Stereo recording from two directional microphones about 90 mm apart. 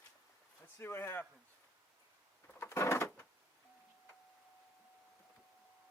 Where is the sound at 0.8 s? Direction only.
25° left (ahead or behind).